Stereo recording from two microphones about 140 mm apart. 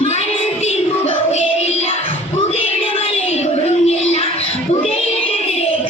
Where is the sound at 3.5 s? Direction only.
50° left (ahead or behind).